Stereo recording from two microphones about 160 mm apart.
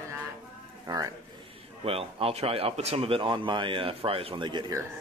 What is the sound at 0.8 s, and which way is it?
Speech, 20° right (ahead or behind).